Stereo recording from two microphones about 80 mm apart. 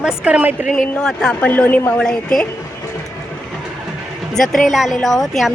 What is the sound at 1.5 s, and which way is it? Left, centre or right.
Speech, left.